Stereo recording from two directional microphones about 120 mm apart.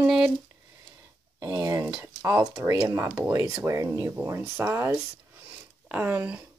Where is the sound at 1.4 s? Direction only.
30° right (ahead or behind).